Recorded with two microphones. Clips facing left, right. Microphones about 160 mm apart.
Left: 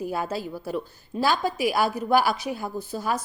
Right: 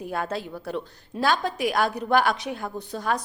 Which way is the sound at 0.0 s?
5° left (ahead or behind).